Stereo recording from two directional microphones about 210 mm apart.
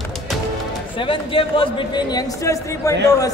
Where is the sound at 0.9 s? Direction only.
25° left (ahead or behind).